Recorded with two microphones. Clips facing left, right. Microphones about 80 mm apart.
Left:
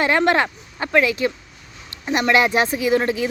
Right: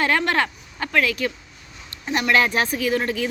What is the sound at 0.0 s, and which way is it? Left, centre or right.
Speech, left.